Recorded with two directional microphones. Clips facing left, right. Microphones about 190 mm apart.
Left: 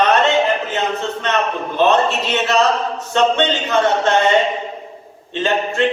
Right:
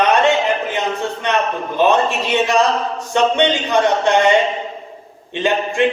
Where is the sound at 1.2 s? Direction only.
15° right (ahead or behind).